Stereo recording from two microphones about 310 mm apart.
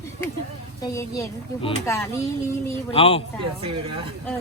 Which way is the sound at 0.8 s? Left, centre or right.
Centre.